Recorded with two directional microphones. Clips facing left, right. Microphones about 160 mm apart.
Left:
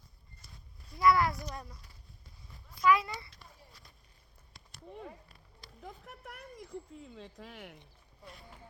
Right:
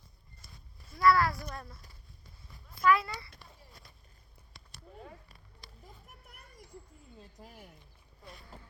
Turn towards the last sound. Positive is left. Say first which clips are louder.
# left 5 dB
turn(degrees=85)